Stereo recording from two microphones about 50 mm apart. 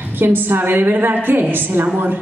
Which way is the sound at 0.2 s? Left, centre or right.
Right.